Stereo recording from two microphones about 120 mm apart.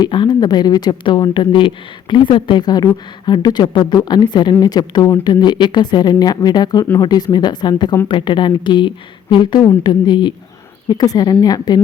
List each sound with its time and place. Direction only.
0.0 s a woman's voice: 40° left (ahead or behind)